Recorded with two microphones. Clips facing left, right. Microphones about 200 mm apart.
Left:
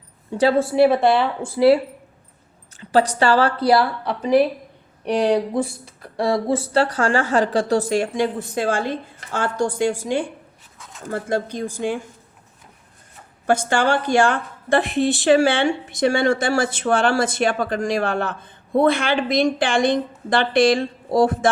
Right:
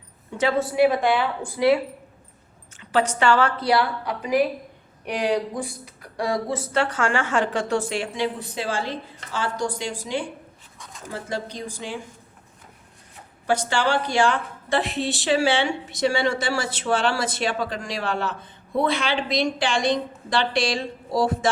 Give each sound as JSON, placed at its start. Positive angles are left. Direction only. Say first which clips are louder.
{"t": 0.3, "sound": "a woman's voice", "louder": "left 5 dB", "side_deg": 35}
{"t": 5.0, "sound": "a woman's voice", "louder": "left 5 dB", "side_deg": 35}
{"t": 6.5, "sound": "a woman's voice", "louder": "left 5 dB", "side_deg": 30}
{"t": 13.5, "sound": "a woman's voice", "louder": "left 4 dB", "side_deg": 50}